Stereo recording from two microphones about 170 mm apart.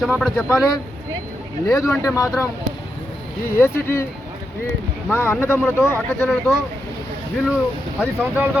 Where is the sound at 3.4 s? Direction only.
15° left (ahead or behind).